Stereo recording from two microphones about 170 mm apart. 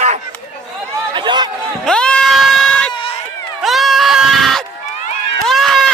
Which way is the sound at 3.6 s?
Centre (ahead or behind).